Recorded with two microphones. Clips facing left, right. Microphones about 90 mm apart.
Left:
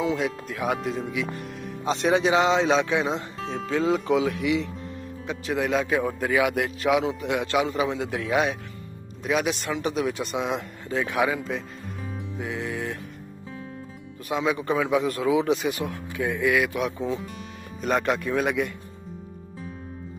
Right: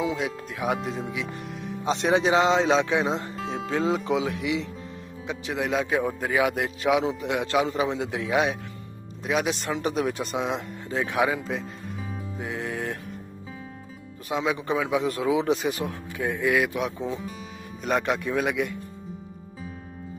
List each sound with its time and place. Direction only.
0.0 s speech: 5° right (ahead or behind)
0.5 s a man's voice: 20° right (ahead or behind)
1.9 s speech: 25° right (ahead or behind)
3.3 s speech: 5° right (ahead or behind)
3.6 s speech: 25° right (ahead or behind)
5.5 s a man's voice: 15° right (ahead or behind)
9.7 s speech: 35° right (ahead or behind)
12.4 s music: 35° right (ahead or behind)
14.3 s speech: 20° right (ahead or behind)
17.8 s a man's voice: 10° right (ahead or behind)